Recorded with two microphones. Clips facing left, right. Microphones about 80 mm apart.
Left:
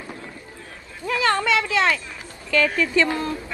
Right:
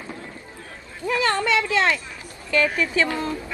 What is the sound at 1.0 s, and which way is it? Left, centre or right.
Speech, left.